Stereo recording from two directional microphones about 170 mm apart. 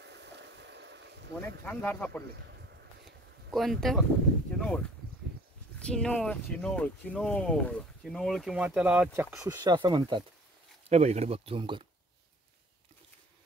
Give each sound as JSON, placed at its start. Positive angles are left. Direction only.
{"t": 0.0, "sound": "boat", "side_deg": -85}
{"t": 1.6, "sound": "speech", "side_deg": 10}
{"t": 2.3, "sound": "a sound", "side_deg": -90}
{"t": 3.5, "sound": "speech", "side_deg": 0}
{"t": 10.9, "sound": "speech", "side_deg": -40}